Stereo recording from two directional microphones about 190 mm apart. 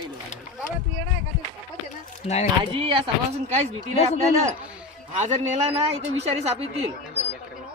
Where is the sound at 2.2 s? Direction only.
35° left (ahead or behind).